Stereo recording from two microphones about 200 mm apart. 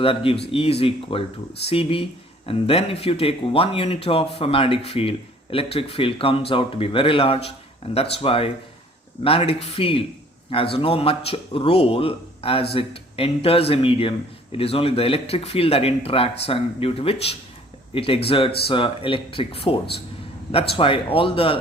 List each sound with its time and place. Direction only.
0.0 s speech: 30° left (ahead or behind)